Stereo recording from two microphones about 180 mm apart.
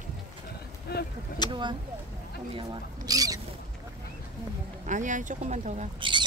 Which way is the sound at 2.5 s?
25° right (ahead or behind).